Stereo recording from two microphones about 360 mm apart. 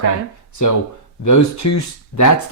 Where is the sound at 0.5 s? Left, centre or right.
Left.